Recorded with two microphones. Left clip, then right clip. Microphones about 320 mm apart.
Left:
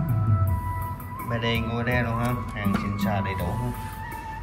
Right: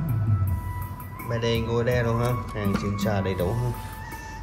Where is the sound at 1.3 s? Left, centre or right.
Centre.